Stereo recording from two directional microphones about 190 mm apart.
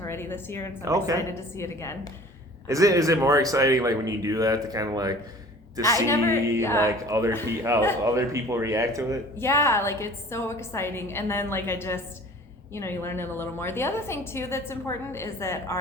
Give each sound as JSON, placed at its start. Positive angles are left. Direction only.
{"t": 0.0, "sound": "a woman's voice", "side_deg": 10}
{"t": 0.9, "sound": "speech", "side_deg": -15}
{"t": 1.3, "sound": "a woman's voice", "side_deg": 15}
{"t": 2.6, "sound": "speech", "side_deg": -15}
{"t": 6.1, "sound": "a woman's voice", "side_deg": 15}
{"t": 6.8, "sound": "speech", "side_deg": -15}
{"t": 9.4, "sound": "a woman's voice", "side_deg": 15}